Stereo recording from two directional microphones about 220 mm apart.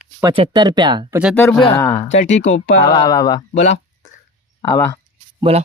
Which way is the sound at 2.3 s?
30° left (ahead or behind).